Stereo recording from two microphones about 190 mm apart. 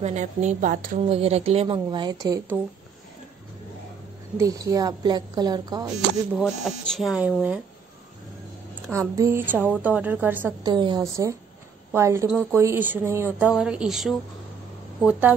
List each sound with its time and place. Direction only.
0.0 s a woman's voice: 40° right (ahead or behind)
1.0 s a woman's voice: 30° right (ahead or behind)
4.4 s a woman's voice: 15° right (ahead or behind)
6.3 s speech: centre (ahead or behind)
8.9 s a woman's voice: 15° right (ahead or behind)
10.6 s a woman's voice: 25° right (ahead or behind)
12.3 s a woman's voice: 5° right (ahead or behind)